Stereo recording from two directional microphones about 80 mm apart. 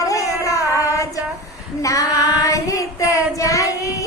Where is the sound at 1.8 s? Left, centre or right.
Left.